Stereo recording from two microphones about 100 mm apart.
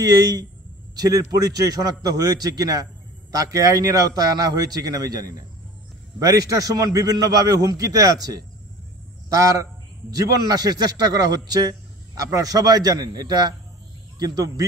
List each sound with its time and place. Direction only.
0.0 s a man's voice: 40° right (ahead or behind)
10.1 s a man's voice: 40° right (ahead or behind)